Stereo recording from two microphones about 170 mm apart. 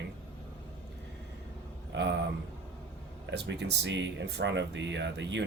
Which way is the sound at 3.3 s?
85° right.